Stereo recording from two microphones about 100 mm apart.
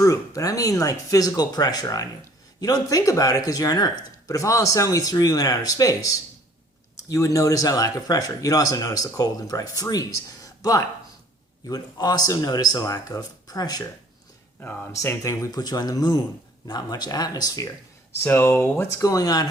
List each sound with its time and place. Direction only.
0.0 s speech: 30° left (ahead or behind)
14.9 s speech: 35° left (ahead or behind)
18.2 s speech: 20° left (ahead or behind)
19.0 s speech: 40° left (ahead or behind)